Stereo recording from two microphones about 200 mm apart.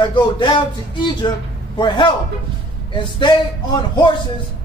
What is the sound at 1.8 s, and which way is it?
A man's voice, 25° left (ahead or behind).